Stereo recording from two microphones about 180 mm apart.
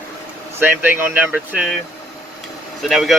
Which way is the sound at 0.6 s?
10° right (ahead or behind).